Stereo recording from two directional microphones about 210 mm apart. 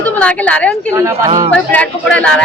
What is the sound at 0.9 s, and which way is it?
Speech, 15° right (ahead or behind).